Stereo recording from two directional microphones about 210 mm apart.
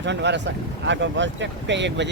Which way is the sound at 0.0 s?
55° right (ahead or behind).